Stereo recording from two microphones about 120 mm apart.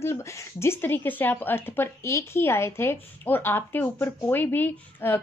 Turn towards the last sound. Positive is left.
turn(degrees=15)  # may be behind; listen again after turning